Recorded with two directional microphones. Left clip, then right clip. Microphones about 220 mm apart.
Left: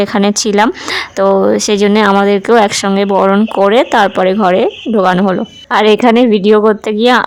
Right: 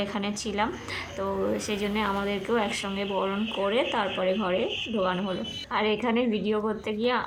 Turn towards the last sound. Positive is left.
turn(degrees=55)  # may be behind; listen again after turning